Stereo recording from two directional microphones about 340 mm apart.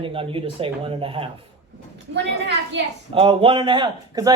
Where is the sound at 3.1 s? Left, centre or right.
Centre.